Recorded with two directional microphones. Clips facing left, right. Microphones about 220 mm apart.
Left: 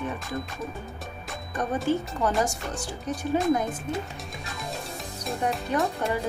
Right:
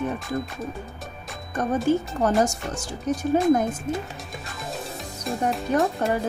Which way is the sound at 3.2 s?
45° right (ahead or behind).